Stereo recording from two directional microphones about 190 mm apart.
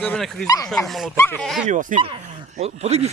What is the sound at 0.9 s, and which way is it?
Speech, centre (ahead or behind).